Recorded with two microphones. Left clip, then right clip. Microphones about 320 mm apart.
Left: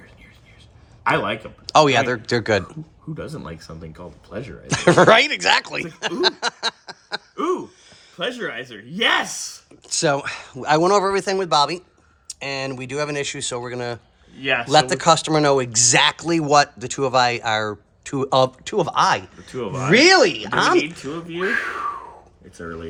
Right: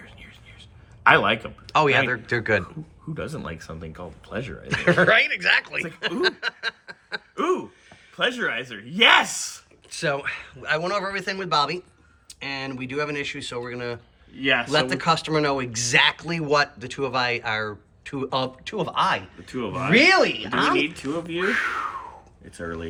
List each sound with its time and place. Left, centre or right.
1.0 s speech: centre
14.4 s speech: left
14.7 s speech: centre